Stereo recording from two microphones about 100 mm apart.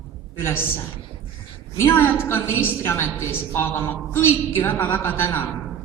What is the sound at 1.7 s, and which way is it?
A woman's voice, 25° left (ahead or behind).